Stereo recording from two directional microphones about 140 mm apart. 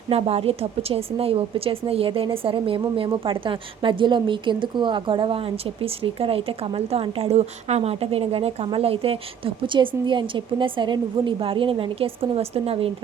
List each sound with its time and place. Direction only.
0.1 s a woman's voice: 45° right (ahead or behind)